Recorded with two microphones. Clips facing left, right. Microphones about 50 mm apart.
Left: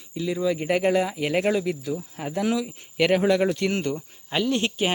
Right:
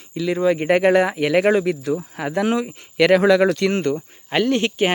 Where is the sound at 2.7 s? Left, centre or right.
Right.